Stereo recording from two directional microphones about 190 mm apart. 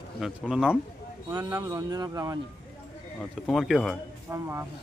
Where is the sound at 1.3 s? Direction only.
20° right (ahead or behind).